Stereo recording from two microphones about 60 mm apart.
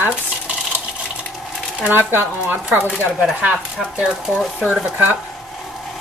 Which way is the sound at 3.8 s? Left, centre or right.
Centre.